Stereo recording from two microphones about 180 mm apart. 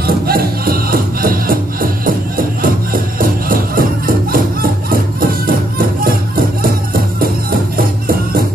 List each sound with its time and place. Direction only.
0.0 s music: 55° right (ahead or behind)